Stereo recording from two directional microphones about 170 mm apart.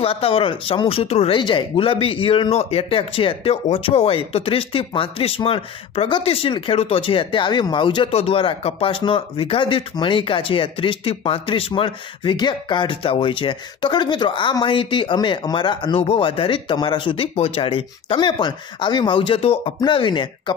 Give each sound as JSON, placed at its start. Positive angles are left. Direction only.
{"t": 0.0, "sound": "speech", "side_deg": 35}